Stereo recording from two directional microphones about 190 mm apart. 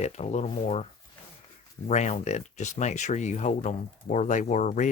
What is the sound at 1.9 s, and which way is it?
Speech, 35° left (ahead or behind).